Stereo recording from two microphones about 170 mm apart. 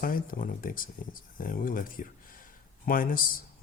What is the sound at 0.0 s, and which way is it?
A man's voice, 55° left (ahead or behind).